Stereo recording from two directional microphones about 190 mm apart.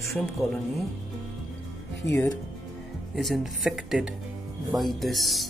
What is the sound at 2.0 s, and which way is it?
Speech, 15° left (ahead or behind).